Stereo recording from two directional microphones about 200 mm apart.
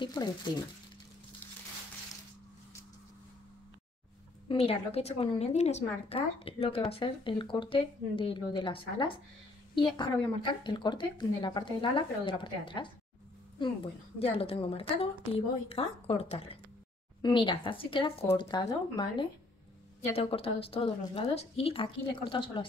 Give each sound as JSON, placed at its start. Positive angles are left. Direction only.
{"t": 0.0, "sound": "a woman's voice", "side_deg": 20}
{"t": 4.5, "sound": "a woman's voice", "side_deg": 30}